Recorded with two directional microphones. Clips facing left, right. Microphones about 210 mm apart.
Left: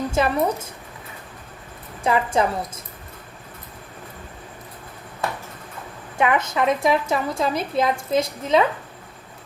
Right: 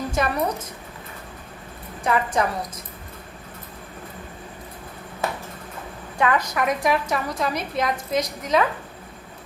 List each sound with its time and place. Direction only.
0.1 s speech: 25° left (ahead or behind)
2.0 s a woman's voice: 25° left (ahead or behind)
6.1 s a woman's voice: 20° left (ahead or behind)